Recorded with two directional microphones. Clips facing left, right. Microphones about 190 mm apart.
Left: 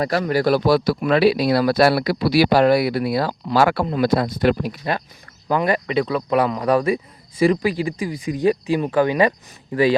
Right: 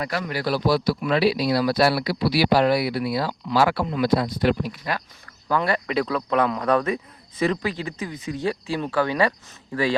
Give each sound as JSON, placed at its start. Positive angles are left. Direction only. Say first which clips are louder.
{"t": 0.0, "sound": "speech", "louder": "left 7 dB", "side_deg": 40}
{"t": 5.5, "sound": "speech", "louder": "left 3 dB", "side_deg": 15}
{"t": 5.9, "sound": "speech", "louder": "left 3 dB", "side_deg": 0}